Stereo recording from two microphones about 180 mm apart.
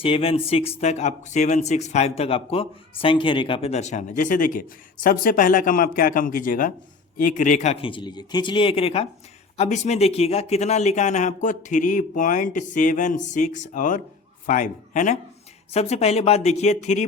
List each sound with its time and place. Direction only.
0.0 s speech: 30° left (ahead or behind)